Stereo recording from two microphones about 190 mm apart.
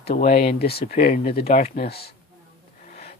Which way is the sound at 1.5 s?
40° left (ahead or behind).